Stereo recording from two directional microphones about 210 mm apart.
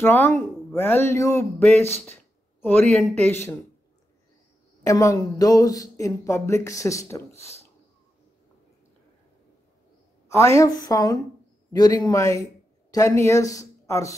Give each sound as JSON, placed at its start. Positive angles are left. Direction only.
{"t": 0.0, "sound": "speech", "side_deg": 10}
{"t": 4.8, "sound": "speech", "side_deg": 15}
{"t": 10.2, "sound": "speech", "side_deg": 15}